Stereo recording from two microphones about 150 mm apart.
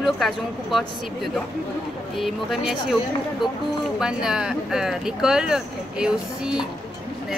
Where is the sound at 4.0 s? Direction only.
5° right (ahead or behind).